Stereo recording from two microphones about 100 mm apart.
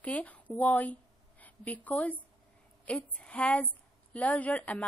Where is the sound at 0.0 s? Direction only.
15° left (ahead or behind).